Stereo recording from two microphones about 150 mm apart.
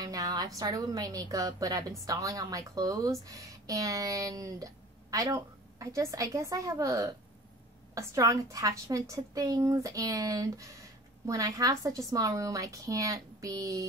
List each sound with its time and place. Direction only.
0.0 s a woman's voice: 25° right (ahead or behind)